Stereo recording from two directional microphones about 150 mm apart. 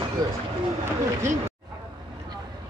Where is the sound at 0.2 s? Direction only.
25° right (ahead or behind).